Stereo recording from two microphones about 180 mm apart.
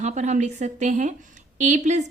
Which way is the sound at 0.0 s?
40° right (ahead or behind).